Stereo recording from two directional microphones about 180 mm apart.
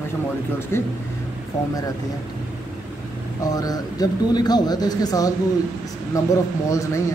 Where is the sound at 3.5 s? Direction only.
20° left (ahead or behind).